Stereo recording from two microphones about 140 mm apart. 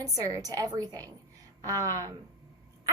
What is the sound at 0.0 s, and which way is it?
A woman's voice, 25° right (ahead or behind).